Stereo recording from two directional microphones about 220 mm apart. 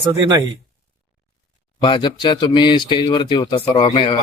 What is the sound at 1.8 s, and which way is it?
A man's voice, 20° left (ahead or behind).